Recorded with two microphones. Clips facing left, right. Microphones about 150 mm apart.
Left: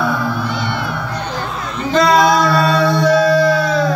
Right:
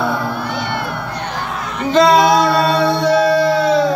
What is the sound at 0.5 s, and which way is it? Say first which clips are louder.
Cat: even; 60° right (ahead or behind).